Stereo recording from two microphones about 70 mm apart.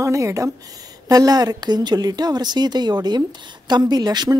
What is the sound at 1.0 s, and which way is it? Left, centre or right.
A woman's voice, right.